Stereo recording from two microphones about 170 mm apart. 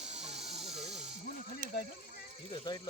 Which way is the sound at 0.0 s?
40° right (ahead or behind).